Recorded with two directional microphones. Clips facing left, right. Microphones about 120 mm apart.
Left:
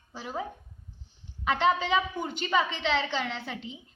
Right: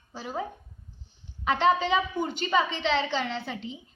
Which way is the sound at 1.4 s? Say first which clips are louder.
Right 2 dB; 5° left (ahead or behind).